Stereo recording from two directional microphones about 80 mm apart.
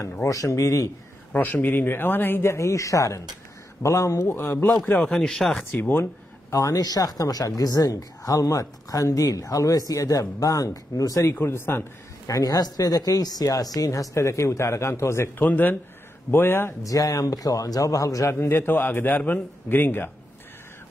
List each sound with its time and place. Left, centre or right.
0.2 s speech: left
1.3 s a man's voice: left
2.5 s speech: left
5.0 s speech: centre
5.7 s a man's voice: left
6.5 s speech: left
11.3 s a man's voice: left
12.3 s speech: left
15.4 s a man's voice: left
16.8 s speech: left
18.4 s a man's voice: left